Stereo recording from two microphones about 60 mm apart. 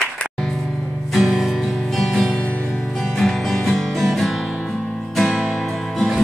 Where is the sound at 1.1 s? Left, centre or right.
Centre.